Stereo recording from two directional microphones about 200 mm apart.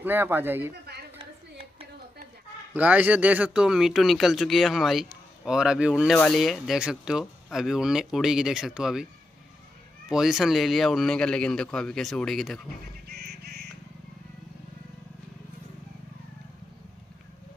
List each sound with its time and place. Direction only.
0.0 s speech: 10° right (ahead or behind)
1.1 s a sound: 25° right (ahead or behind)
2.7 s speech: 10° right (ahead or behind)
10.0 s speech: centre (ahead or behind)
13.1 s bird: 55° right (ahead or behind)